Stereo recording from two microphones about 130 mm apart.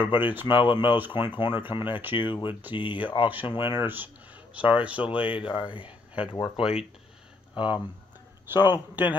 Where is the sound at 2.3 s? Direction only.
40° left (ahead or behind).